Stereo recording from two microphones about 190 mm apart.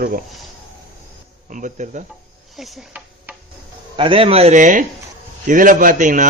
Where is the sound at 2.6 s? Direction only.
5° right (ahead or behind).